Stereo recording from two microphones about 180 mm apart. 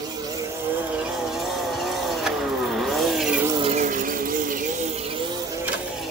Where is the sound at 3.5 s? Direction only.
35° right (ahead or behind).